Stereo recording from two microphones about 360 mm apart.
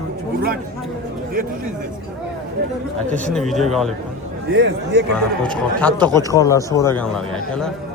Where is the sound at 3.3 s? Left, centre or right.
Centre.